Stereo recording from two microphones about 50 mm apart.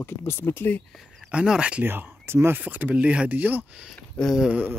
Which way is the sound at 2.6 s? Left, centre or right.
Right.